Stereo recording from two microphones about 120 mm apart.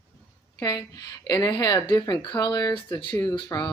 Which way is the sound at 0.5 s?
30° left (ahead or behind).